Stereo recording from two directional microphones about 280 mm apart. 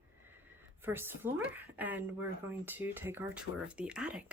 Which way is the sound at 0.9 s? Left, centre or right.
Centre.